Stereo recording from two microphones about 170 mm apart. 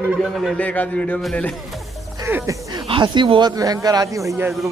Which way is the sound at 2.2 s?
15° right (ahead or behind).